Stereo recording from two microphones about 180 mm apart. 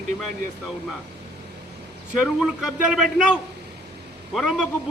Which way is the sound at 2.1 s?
5° right (ahead or behind).